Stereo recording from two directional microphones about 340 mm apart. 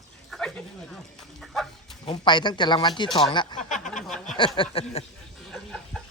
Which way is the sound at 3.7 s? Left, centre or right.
Left.